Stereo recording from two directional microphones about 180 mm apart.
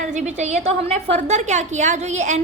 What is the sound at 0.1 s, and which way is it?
A woman's voice, 40° right (ahead or behind).